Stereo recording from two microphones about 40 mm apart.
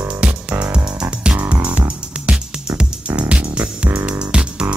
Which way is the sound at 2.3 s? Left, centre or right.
Right.